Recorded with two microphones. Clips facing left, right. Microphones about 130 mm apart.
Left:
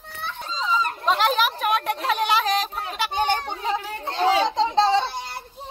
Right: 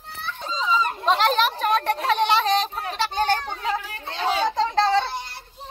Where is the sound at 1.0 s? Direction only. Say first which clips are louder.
Right 1 dB; 5° left (ahead or behind).